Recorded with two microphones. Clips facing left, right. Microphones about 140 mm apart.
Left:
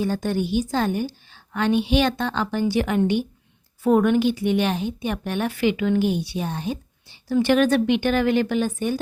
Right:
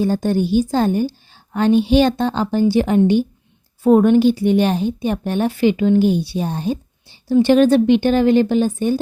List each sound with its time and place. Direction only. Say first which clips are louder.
0.0 s a woman's voice: right 6 dB; 35° right (ahead or behind)